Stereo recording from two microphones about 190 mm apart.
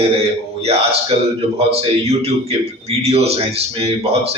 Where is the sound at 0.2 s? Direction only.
30° right (ahead or behind).